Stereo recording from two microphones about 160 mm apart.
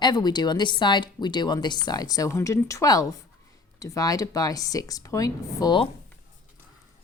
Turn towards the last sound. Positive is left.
turn(degrees=25)  # may be behind; listen again after turning